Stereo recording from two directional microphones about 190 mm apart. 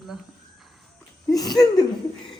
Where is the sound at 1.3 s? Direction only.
20° left (ahead or behind).